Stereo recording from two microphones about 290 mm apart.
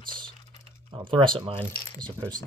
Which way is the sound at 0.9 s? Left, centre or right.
Centre.